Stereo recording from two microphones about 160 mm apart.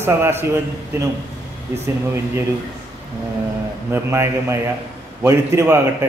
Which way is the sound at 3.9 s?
15° right (ahead or behind).